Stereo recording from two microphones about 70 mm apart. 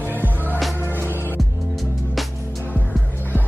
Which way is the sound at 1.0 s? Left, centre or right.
Left.